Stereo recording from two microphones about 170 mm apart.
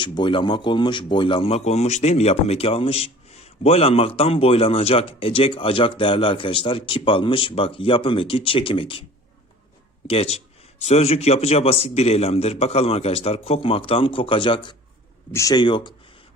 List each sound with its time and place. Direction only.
0.0 s speech: 30° left (ahead or behind)
10.1 s speech: 35° left (ahead or behind)
15.3 s speech: 20° left (ahead or behind)